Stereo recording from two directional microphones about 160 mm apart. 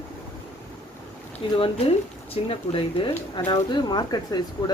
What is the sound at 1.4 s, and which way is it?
Speech, 30° left (ahead or behind).